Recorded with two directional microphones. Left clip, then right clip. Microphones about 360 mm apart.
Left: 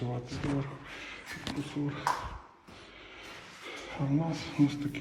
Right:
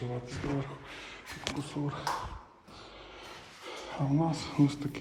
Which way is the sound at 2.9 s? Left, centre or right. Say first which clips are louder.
Left 1 dB; centre.